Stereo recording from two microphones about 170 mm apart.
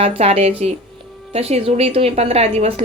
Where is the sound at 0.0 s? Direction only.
35° right (ahead or behind).